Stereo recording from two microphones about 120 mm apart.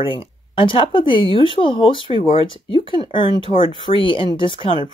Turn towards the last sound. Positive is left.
turn(degrees=45)  # may be behind; listen again after turning